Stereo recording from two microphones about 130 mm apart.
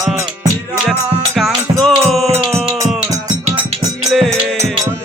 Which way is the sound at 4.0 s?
Centre (ahead or behind).